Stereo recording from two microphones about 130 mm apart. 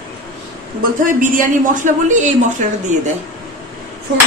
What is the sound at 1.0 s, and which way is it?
A man's voice, 90° right.